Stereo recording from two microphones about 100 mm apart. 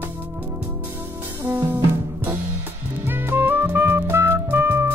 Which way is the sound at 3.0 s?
20° right (ahead or behind).